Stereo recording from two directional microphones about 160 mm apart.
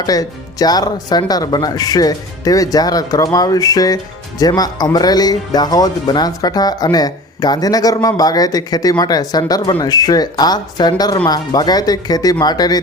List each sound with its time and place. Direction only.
0.0 s speech: 25° left (ahead or behind)